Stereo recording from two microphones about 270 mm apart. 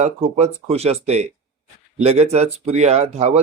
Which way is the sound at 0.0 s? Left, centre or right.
Right.